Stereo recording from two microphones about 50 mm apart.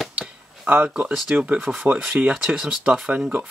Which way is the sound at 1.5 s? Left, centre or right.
Right.